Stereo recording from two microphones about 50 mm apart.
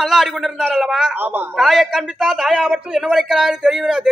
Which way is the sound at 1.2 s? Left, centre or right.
Right.